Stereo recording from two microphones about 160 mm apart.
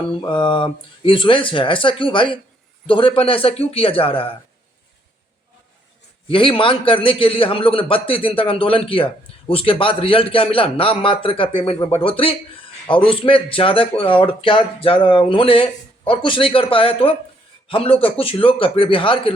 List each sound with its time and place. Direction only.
0.1 s speech: 30° left (ahead or behind)
6.2 s speech: 35° left (ahead or behind)